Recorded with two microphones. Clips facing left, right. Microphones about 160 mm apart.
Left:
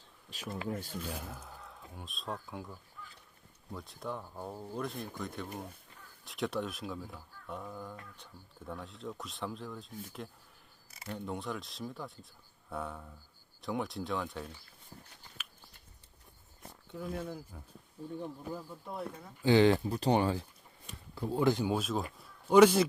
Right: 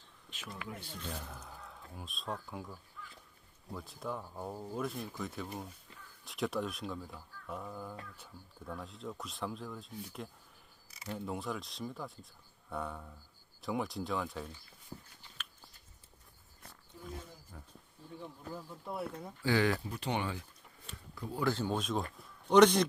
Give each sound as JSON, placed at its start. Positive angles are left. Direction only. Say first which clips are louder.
{"t": 0.4, "sound": "speech", "louder": "left 7 dB", "side_deg": 25}
{"t": 0.7, "sound": "speech", "louder": "left 8 dB", "side_deg": 40}
{"t": 0.9, "sound": "a man's voice", "louder": "left 3 dB", "side_deg": 5}
{"t": 16.9, "sound": "speech", "louder": "left 9 dB", "side_deg": 65}
{"t": 18.5, "sound": "speech", "louder": "even", "side_deg": -5}
{"t": 19.4, "sound": "speech", "louder": "left 6 dB", "side_deg": 25}
{"t": 21.4, "sound": "speech", "louder": "left 3 dB", "side_deg": 15}